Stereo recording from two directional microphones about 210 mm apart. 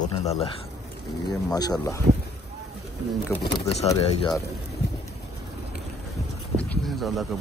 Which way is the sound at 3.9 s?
20° left (ahead or behind).